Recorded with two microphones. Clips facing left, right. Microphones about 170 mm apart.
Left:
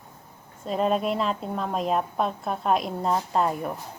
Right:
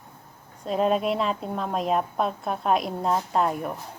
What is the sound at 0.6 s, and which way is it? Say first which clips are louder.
A woman's voice: right 1 dB; centre (ahead or behind).